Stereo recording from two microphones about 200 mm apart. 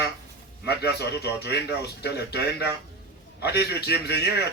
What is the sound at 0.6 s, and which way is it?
A man's voice, 55° left (ahead or behind).